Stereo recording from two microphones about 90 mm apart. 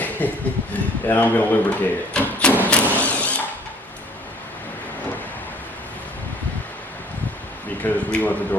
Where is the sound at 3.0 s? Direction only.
15° left (ahead or behind).